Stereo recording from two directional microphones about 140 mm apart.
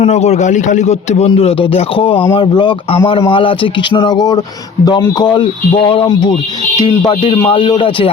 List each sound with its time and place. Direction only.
0.0 s a man's voice: 50° left (ahead or behind)
1.3 s speech: 40° left (ahead or behind)